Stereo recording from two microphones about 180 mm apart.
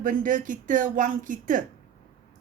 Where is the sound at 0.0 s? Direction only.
45° right (ahead or behind).